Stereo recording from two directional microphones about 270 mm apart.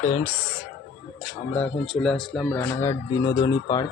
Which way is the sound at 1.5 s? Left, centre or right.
Centre.